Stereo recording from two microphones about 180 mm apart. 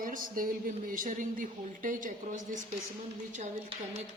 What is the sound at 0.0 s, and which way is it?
A woman's voice, 50° right (ahead or behind).